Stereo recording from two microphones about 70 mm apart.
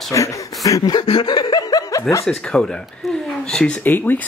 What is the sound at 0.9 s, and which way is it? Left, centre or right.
Chuckle, left.